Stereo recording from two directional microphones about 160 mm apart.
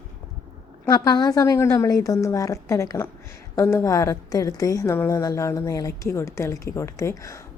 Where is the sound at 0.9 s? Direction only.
25° left (ahead or behind).